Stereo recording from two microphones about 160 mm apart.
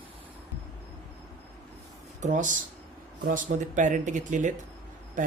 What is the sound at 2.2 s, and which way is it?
A man's voice, 50° right (ahead or behind).